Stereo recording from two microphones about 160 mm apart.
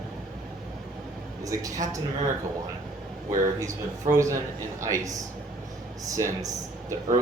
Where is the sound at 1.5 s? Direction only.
20° right (ahead or behind).